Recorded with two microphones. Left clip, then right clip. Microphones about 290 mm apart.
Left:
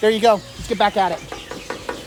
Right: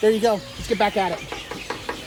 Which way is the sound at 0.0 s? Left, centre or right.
Centre.